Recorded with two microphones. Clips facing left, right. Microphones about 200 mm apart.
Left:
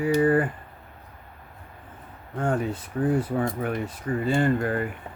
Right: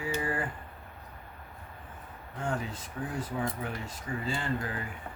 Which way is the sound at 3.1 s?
60° left (ahead or behind).